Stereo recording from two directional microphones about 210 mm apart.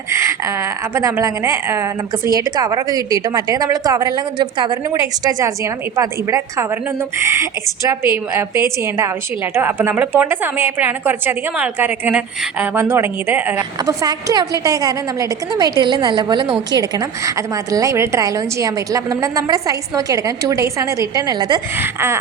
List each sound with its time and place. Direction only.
0.1 s a woman's voice: 15° right (ahead or behind)